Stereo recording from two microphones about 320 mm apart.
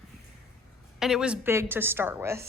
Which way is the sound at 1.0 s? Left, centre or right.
Centre.